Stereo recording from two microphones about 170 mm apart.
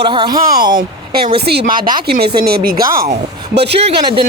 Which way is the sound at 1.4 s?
70° right (ahead or behind).